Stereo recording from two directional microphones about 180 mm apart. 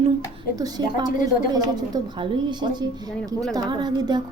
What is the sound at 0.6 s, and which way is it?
A woman's voice, 20° right (ahead or behind).